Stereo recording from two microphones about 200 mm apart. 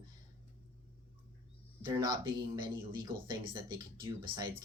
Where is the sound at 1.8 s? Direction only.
20° right (ahead or behind).